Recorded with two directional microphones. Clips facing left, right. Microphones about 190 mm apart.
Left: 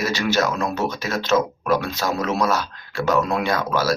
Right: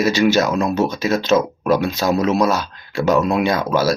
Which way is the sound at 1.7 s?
15° right (ahead or behind).